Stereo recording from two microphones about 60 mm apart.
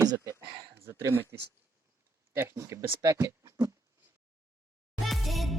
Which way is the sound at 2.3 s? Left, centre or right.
Right.